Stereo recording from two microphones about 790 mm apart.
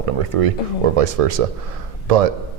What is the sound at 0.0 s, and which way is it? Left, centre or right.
Speech, right.